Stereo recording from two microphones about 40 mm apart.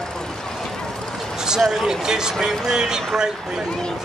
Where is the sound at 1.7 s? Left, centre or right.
Centre.